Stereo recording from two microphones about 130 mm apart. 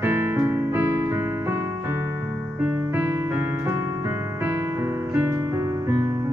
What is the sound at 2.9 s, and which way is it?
Music, 15° right (ahead or behind).